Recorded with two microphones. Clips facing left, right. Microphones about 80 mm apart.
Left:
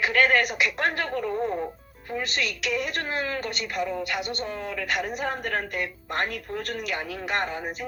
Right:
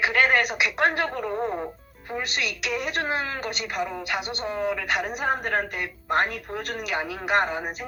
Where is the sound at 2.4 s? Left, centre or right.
Centre.